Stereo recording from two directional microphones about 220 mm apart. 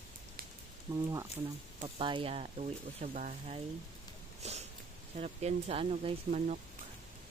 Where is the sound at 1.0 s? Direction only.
15° right (ahead or behind); by 3.6 s 30° right (ahead or behind).